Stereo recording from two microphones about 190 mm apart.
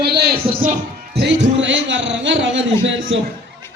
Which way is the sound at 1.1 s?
70° right (ahead or behind).